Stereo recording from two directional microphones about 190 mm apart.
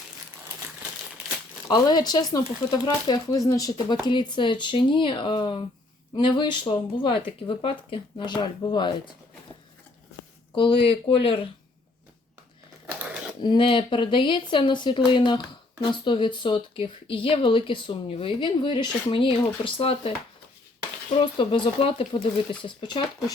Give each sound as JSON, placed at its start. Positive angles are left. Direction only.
{"t": 1.6, "sound": "speech", "side_deg": 20}
{"t": 10.5, "sound": "speech", "side_deg": 25}
{"t": 13.4, "sound": "speech", "side_deg": 25}